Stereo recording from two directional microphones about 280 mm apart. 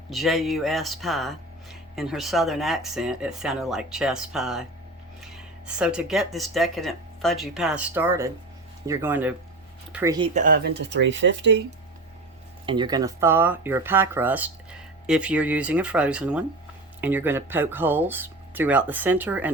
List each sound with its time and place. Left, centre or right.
0.1 s speech: centre
10.3 s speech: right
12.6 s speech: centre